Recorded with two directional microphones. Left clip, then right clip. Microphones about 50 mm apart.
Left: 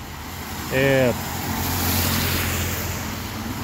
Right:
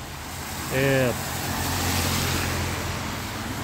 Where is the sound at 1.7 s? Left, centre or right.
Left.